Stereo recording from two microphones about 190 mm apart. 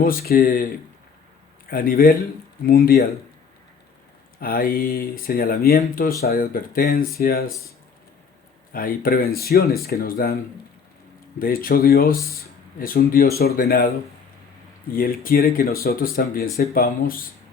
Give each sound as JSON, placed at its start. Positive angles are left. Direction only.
{"t": 0.0, "sound": "speech", "side_deg": 50}
{"t": 1.7, "sound": "speech", "side_deg": 50}
{"t": 4.4, "sound": "speech", "side_deg": 50}
{"t": 8.7, "sound": "speech", "side_deg": 50}
{"t": 11.3, "sound": "speech", "side_deg": 50}
{"t": 14.9, "sound": "speech", "side_deg": 50}